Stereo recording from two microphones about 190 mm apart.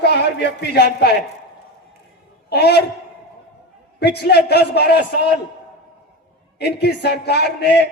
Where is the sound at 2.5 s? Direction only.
60° left (ahead or behind).